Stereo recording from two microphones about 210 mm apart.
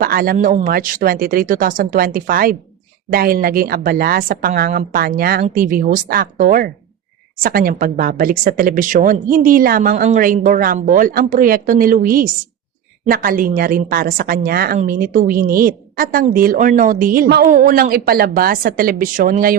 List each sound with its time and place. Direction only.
0.0 s a woman's voice: 45° right (ahead or behind)